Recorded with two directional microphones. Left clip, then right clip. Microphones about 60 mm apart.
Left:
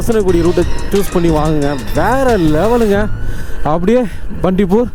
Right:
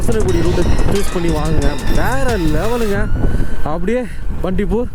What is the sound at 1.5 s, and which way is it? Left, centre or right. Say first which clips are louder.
Speech: left 5 dB; left.